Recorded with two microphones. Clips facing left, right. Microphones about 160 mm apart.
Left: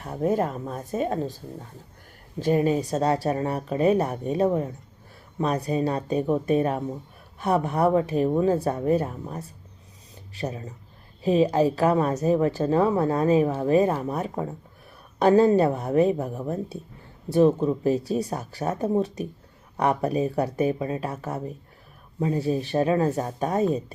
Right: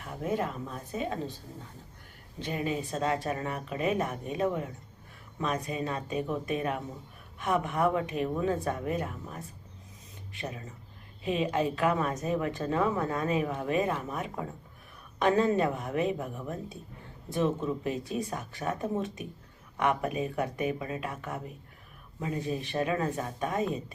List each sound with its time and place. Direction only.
0.0 s a woman's voice: 40° left (ahead or behind)
2.4 s a woman's voice: 40° left (ahead or behind)